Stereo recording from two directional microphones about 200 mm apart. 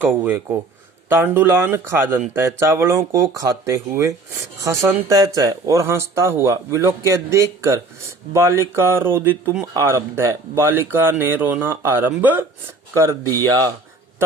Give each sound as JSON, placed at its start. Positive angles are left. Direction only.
{"t": 0.0, "sound": "speech", "side_deg": -10}